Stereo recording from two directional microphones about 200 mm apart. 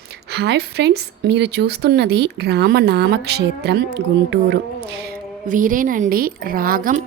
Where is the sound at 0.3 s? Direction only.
55° right (ahead or behind).